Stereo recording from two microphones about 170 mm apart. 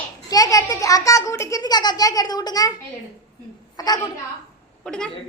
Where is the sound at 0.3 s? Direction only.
20° left (ahead or behind).